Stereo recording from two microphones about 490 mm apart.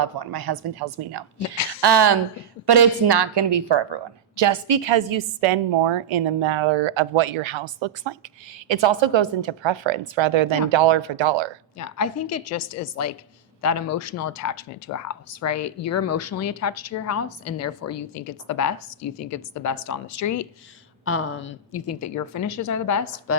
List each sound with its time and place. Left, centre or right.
0.0 s a woman's voice: right
11.8 s speech: left
21.0 s speech: left